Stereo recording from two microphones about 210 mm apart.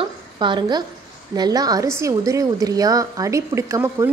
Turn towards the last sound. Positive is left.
turn(degrees=-15)  # may be behind; listen again after turning